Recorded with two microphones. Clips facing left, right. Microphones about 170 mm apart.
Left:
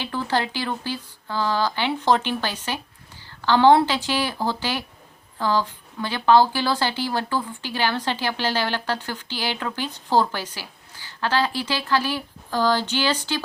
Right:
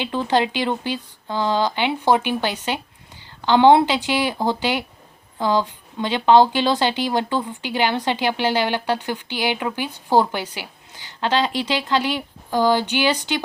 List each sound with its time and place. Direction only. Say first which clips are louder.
0.0 s speech: right 5 dB; 20° right (ahead or behind)